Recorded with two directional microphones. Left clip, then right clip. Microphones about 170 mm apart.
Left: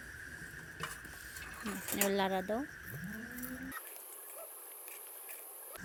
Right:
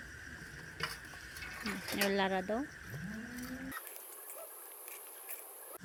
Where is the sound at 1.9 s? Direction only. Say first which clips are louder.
Even; 15° left (ahead or behind).